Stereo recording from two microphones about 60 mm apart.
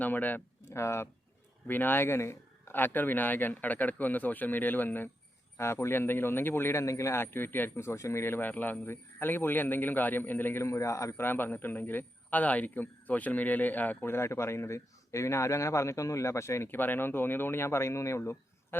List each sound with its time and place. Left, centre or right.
0.0 s speech: left
0.7 s speech: left
1.6 s a man's voice: left
2.7 s speech: left
5.5 s speech: left
6.8 s speech: left
10.6 s a man's voice: left
11.2 s a man's voice: left
14.0 s speech: left
16.6 s speech: left